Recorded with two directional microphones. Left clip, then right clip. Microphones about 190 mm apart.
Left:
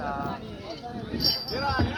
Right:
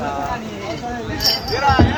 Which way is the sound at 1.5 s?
25° right (ahead or behind).